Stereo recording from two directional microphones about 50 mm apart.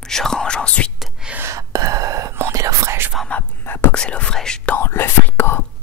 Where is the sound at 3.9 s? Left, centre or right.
Left.